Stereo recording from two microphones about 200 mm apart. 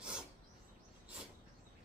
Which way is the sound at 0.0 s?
5° right (ahead or behind).